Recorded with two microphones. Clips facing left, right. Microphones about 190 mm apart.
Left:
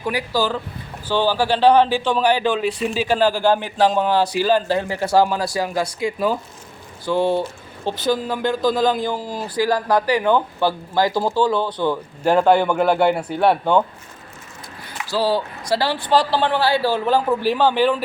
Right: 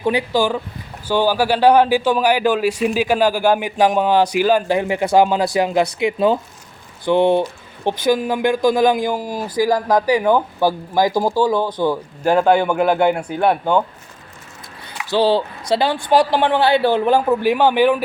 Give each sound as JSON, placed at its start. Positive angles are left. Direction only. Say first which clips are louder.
{"t": 0.0, "sound": "speech", "louder": "right 4 dB", "side_deg": -25}
{"t": 1.0, "sound": "speech", "louder": "right 2 dB", "side_deg": -10}
{"t": 15.1, "sound": "speech", "louder": "right 4 dB", "side_deg": -25}